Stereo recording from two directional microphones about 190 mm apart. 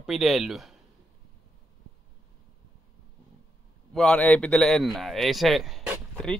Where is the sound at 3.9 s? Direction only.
5° left (ahead or behind).